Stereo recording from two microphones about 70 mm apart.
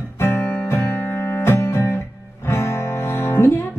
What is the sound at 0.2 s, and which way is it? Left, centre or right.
Music, left.